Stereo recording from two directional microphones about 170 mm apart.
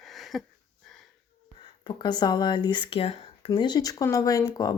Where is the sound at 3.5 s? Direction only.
25° left (ahead or behind).